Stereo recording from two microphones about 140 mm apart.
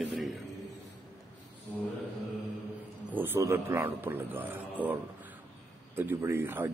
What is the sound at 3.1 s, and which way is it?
A man's voice, 15° right (ahead or behind).